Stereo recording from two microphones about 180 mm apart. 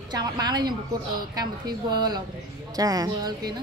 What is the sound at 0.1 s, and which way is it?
A woman's voice, 20° right (ahead or behind).